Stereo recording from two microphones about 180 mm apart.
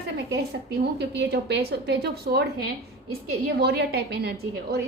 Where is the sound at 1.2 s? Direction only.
70° right (ahead or behind).